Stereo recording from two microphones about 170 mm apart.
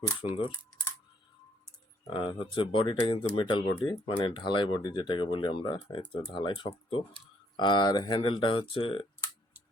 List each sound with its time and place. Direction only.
0.2 s speech: 35° left (ahead or behind)
2.0 s speech: 30° left (ahead or behind)